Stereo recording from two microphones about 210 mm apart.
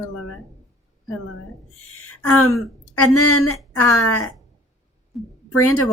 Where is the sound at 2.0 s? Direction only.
90° left.